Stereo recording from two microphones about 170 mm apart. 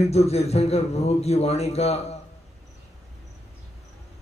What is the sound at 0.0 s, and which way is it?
A man's voice, 40° left (ahead or behind).